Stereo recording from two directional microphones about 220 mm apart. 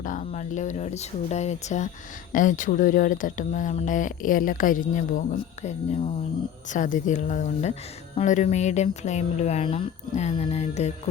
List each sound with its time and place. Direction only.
0.0 s speech: 35° left (ahead or behind)